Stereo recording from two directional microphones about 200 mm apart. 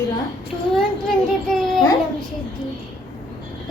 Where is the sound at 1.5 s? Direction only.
Centre (ahead or behind).